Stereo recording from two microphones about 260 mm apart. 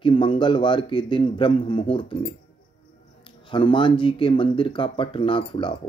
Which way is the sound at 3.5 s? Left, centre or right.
Centre.